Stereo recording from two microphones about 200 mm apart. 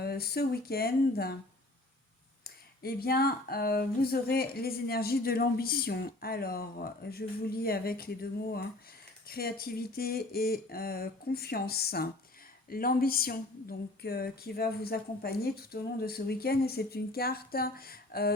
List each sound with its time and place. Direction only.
0.0 s speech: 50° left (ahead or behind)
2.4 s speech: 50° left (ahead or behind)